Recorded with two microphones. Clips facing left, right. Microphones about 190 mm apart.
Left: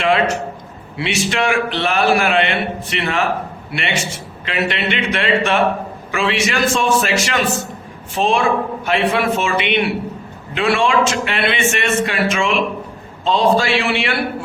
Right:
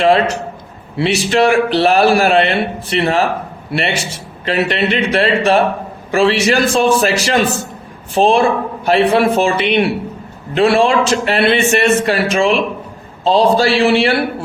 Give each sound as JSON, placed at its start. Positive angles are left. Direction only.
{"t": 0.0, "sound": "a man's voice", "side_deg": -35}
{"t": 4.4, "sound": "a man's voice", "side_deg": -35}